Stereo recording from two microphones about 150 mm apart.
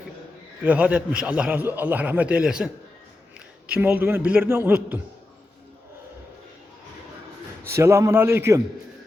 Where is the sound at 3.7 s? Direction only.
10° right (ahead or behind).